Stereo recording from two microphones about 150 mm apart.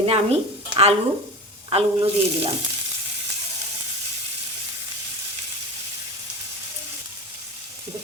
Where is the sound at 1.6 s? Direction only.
35° right (ahead or behind).